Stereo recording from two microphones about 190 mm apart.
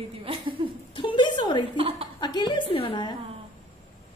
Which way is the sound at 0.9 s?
25° left (ahead or behind).